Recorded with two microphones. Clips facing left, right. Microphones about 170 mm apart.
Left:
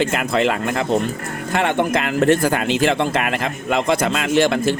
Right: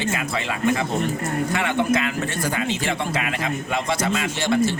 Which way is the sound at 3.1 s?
60° left (ahead or behind).